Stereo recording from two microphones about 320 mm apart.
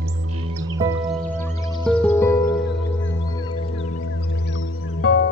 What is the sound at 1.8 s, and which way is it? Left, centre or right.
Music, centre.